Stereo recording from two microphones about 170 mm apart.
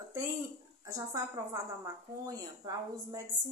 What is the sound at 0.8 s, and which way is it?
A woman's voice, 20° right (ahead or behind).